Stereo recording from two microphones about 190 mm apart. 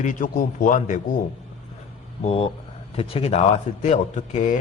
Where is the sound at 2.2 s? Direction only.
30° left (ahead or behind).